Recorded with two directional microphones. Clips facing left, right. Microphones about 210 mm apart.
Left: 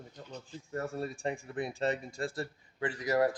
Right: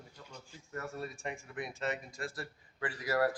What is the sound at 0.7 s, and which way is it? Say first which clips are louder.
Speech: left 5 dB; 30° left (ahead or behind).